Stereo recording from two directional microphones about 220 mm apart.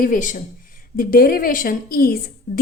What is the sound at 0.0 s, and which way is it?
A woman's voice, 35° left (ahead or behind).